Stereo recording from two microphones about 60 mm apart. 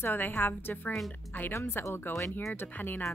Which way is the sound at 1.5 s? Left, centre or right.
Left.